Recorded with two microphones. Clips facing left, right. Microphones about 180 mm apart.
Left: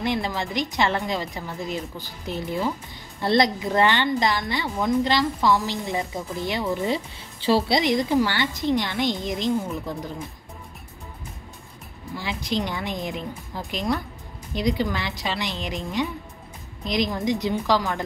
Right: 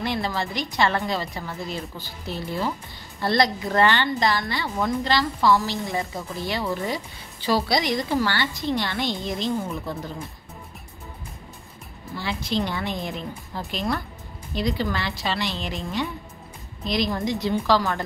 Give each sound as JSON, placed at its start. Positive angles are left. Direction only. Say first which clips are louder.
{"t": 0.0, "sound": "a woman's voice", "louder": "left 1 dB", "side_deg": 20}
{"t": 12.2, "sound": "a woman's voice", "louder": "right 1 dB", "side_deg": 15}